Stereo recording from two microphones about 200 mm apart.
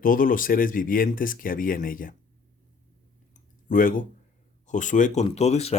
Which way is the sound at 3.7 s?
45° left (ahead or behind).